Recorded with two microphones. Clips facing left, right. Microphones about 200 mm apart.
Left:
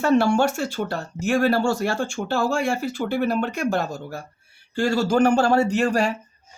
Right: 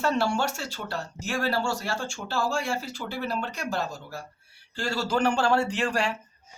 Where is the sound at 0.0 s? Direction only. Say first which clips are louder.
Left 7 dB; 50° left (ahead or behind).